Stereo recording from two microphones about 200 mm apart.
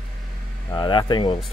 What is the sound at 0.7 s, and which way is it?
Speech, 20° left (ahead or behind).